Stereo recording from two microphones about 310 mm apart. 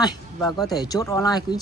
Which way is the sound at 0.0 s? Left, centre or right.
Centre.